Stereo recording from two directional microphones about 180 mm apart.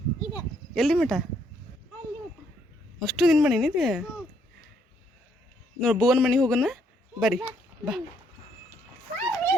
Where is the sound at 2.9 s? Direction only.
Centre (ahead or behind).